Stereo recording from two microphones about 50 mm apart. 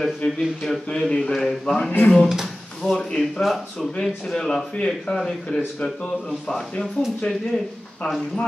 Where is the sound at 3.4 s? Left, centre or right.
Centre.